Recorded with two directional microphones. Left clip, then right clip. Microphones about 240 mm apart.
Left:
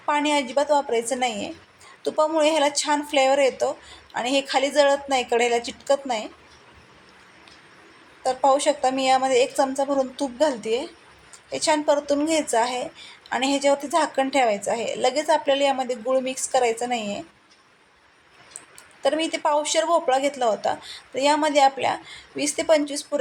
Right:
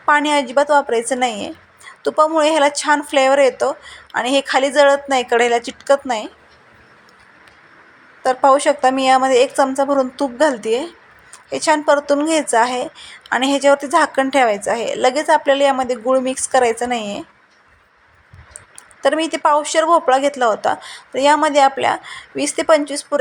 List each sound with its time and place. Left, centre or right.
0.0 s a woman's voice: centre
8.2 s a woman's voice: centre
19.0 s a woman's voice: centre